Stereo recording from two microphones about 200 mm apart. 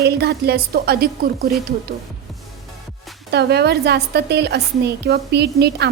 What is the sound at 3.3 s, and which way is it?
A woman's voice, 55° right (ahead or behind).